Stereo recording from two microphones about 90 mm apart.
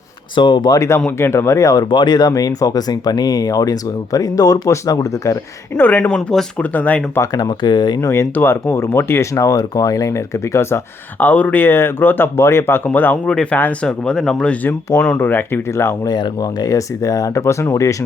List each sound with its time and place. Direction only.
0.3 s speech: 60° left (ahead or behind)
0.8 s speech: 30° left (ahead or behind)
1.9 s speech: 55° left (ahead or behind); by 5.8 s 35° left (ahead or behind)
5.8 s speech: 20° left (ahead or behind)
7.3 s speech: 50° left (ahead or behind)
8.0 s speech: 30° left (ahead or behind)
11.2 s speech: 20° left (ahead or behind)
16.0 s speech: 50° left (ahead or behind); by 17.9 s 30° left (ahead or behind)